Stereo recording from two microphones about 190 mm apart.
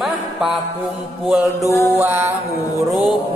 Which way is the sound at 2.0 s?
10° right (ahead or behind).